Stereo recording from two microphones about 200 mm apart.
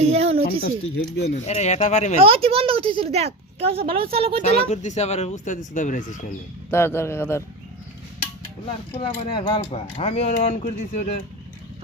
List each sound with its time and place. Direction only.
0.0 s a sound: 30° right (ahead or behind)
0.6 s speech: 55° left (ahead or behind)
1.5 s speech: 35° left (ahead or behind)
2.2 s speech: 30° right (ahead or behind)
4.7 s speech: 35° left (ahead or behind)
6.7 s speech: 10° left (ahead or behind)
8.6 s speech: 30° left (ahead or behind)